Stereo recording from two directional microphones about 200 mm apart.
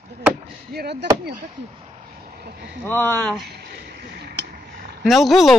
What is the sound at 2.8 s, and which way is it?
Speech, 10° left (ahead or behind).